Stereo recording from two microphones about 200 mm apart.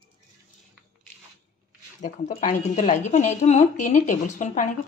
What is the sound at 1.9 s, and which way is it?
Speech, 35° left (ahead or behind).